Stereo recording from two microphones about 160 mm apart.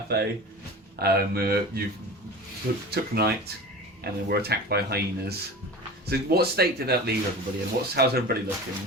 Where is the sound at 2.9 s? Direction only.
85° right.